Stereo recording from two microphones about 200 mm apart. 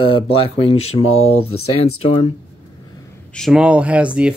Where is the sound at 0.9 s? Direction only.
90° left.